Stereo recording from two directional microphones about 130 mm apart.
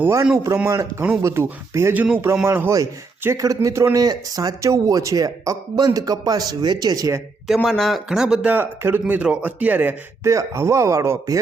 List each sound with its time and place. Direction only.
0.0 s speech: 25° right (ahead or behind)
7.4 s speech: centre (ahead or behind); by 11.3 s 20° right (ahead or behind)